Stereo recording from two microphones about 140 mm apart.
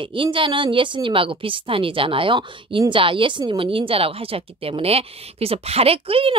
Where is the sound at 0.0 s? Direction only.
35° right (ahead or behind).